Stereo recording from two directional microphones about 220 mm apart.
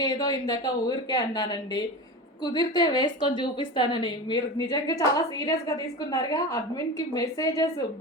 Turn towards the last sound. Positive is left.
turn(degrees=15)  # may be behind; listen again after turning